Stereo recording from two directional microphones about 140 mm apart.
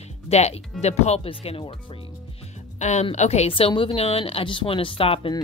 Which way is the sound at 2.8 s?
55° left (ahead or behind).